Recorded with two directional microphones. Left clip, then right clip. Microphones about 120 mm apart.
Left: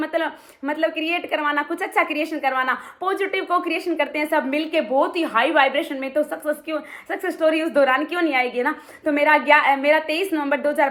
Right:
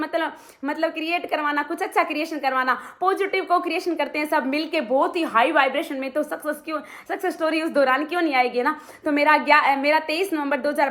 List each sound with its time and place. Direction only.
0.1 s a woman's voice: 20° right (ahead or behind)